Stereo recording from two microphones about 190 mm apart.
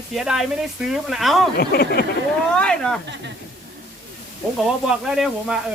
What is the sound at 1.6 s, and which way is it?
Speech, 55° left (ahead or behind).